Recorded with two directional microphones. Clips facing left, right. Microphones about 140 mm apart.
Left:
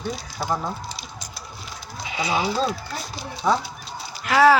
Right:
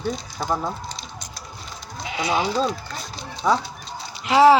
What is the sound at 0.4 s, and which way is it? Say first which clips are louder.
Speech: right 1 dB; 5° left (ahead or behind).